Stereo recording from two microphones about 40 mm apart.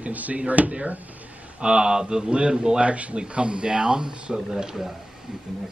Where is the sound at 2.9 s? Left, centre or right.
Right; by 4.8 s centre.